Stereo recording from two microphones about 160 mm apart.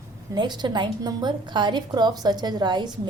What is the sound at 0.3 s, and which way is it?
A woman's voice, 25° right (ahead or behind).